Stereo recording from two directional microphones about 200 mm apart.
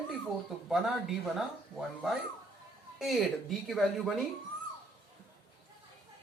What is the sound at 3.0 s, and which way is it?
Speech, centre (ahead or behind).